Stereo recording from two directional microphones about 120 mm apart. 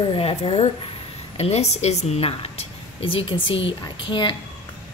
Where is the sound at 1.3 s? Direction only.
60° left (ahead or behind); by 4.4 s 45° left (ahead or behind).